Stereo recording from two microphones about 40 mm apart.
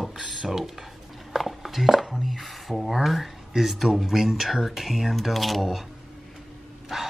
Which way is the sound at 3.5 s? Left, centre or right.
Centre.